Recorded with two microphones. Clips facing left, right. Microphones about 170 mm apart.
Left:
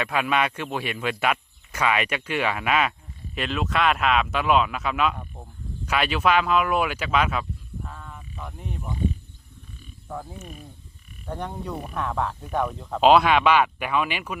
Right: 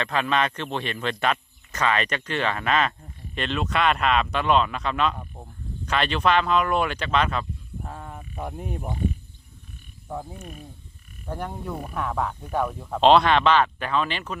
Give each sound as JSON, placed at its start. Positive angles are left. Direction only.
{"t": 0.0, "sound": "speech", "side_deg": 10}
{"t": 5.8, "sound": "speech", "side_deg": 10}
{"t": 7.8, "sound": "frog", "side_deg": -40}
{"t": 10.1, "sound": "croak", "side_deg": -15}
{"t": 11.3, "sound": "speech", "side_deg": -5}
{"t": 13.0, "sound": "speech", "side_deg": 5}